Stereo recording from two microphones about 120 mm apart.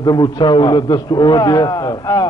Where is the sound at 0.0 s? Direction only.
35° left (ahead or behind).